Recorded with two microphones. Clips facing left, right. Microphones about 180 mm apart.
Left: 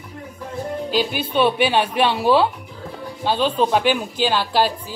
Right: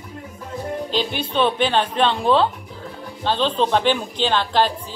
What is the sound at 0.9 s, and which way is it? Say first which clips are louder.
Music: left 3 dB; 5° left (ahead or behind).